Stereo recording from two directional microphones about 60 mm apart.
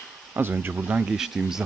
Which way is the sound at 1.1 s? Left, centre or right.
Centre.